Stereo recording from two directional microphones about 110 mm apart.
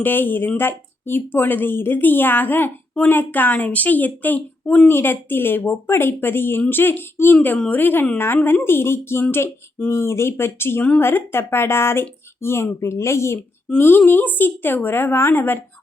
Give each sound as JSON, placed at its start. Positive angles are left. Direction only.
{"t": 0.0, "sound": "a woman's voice", "side_deg": 20}